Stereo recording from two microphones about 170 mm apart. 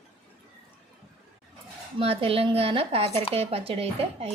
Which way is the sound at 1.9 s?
35° right (ahead or behind).